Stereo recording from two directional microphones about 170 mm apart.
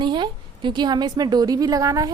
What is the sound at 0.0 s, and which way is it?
A woman's voice, 25° right (ahead or behind).